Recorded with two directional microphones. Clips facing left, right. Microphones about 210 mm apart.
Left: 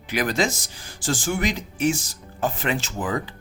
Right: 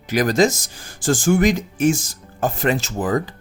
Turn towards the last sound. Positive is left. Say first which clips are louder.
# right 6 dB
turn(degrees=-45)  # may be behind; listen again after turning